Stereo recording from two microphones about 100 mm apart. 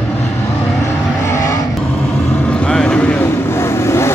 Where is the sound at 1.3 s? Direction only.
30° left (ahead or behind).